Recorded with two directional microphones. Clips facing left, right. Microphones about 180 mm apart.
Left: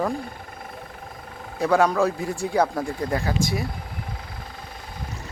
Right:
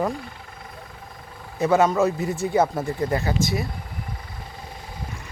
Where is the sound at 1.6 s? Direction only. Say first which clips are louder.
Right 1 dB; 5° right (ahead or behind).